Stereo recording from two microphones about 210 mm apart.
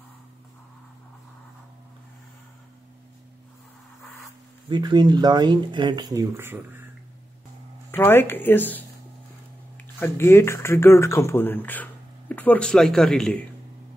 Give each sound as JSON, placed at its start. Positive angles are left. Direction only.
{"t": 4.6, "sound": "speech", "side_deg": -20}
{"t": 7.9, "sound": "speech", "side_deg": 10}